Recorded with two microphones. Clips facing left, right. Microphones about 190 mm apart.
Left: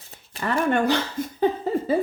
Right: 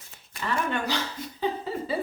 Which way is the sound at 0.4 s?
50° left (ahead or behind).